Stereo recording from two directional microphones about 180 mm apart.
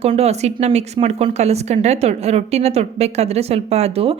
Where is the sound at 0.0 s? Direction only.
35° right (ahead or behind).